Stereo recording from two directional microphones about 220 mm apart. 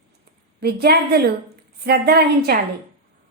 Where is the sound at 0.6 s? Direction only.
45° right (ahead or behind).